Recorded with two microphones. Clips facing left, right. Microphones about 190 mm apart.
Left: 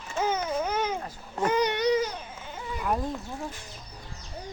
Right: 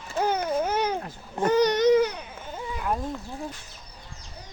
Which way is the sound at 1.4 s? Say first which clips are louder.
Right 5 dB; 40° right (ahead or behind).